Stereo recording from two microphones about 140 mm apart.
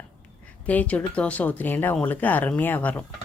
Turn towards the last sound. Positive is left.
turn(degrees=10)  # may be behind; listen again after turning